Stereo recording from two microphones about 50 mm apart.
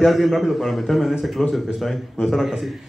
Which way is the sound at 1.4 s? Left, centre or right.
Centre.